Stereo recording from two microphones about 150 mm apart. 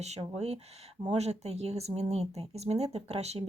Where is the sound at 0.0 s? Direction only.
45° right (ahead or behind).